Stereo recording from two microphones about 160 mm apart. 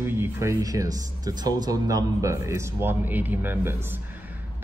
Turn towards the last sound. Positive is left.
turn(degrees=-10)  # may be behind; listen again after turning